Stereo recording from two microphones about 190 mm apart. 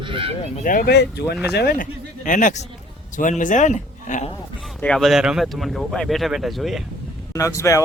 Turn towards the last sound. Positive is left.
turn(degrees=15)  # may be behind; listen again after turning